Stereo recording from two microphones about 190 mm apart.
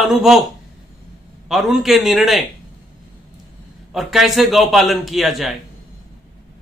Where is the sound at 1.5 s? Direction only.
Centre (ahead or behind).